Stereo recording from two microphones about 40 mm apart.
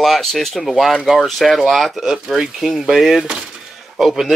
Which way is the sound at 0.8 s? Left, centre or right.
Centre.